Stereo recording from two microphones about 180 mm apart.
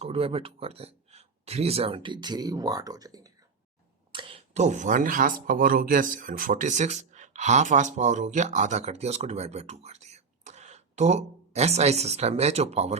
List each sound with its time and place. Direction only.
0.0 s speech: 30° right (ahead or behind)